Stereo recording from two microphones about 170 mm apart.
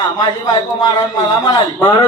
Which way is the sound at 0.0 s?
25° left (ahead or behind).